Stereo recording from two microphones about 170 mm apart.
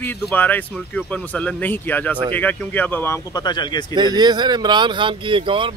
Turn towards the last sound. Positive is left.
turn(degrees=-30)  # may be behind; listen again after turning